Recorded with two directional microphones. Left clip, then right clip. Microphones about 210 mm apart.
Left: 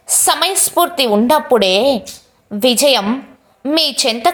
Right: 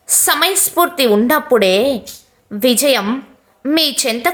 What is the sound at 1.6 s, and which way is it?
A woman's voice, 15° right (ahead or behind).